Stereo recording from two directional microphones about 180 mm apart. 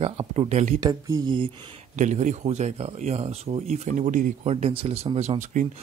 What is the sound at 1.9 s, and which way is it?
Speech, 40° right (ahead or behind).